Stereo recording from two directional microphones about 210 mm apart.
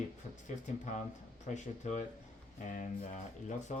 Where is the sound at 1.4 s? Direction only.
35° left (ahead or behind).